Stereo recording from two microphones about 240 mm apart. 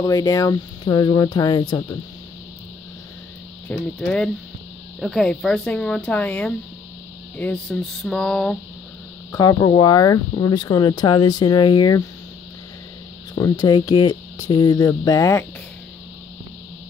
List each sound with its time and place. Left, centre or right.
0.0 s speech: centre
3.6 s speech: centre
9.3 s speech: centre
13.3 s speech: centre